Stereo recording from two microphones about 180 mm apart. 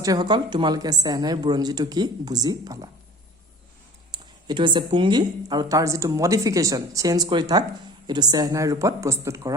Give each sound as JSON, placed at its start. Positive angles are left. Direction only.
{"t": 0.0, "sound": "speech", "side_deg": -20}
{"t": 4.1, "sound": "speech", "side_deg": -25}